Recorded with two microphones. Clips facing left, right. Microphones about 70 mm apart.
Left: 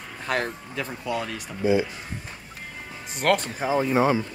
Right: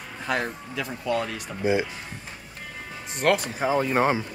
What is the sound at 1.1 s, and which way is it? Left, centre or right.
Speech, centre.